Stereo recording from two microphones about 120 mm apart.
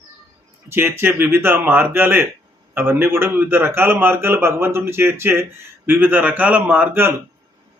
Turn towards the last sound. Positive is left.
turn(degrees=-20)  # may be behind; listen again after turning